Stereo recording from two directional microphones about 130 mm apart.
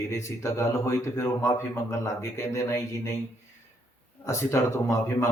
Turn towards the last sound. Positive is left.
turn(degrees=20)  # may be behind; listen again after turning